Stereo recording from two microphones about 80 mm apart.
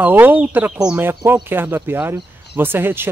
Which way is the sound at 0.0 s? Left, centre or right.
Right.